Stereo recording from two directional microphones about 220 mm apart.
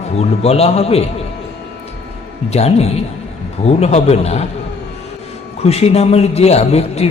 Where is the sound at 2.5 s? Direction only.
30° left (ahead or behind).